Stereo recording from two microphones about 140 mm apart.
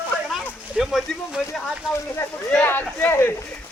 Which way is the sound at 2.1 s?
15° left (ahead or behind).